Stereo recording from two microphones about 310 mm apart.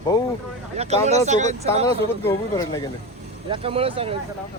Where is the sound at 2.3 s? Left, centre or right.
Centre.